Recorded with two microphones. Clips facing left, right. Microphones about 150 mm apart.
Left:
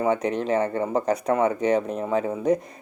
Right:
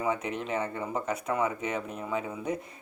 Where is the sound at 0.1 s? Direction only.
35° left (ahead or behind).